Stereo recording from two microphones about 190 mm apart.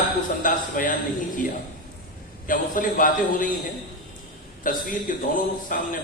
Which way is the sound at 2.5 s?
45° left (ahead or behind).